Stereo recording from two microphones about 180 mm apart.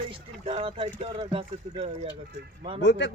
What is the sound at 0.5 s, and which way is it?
Speech, 30° right (ahead or behind).